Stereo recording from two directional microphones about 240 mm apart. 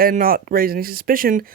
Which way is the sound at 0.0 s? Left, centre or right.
Right.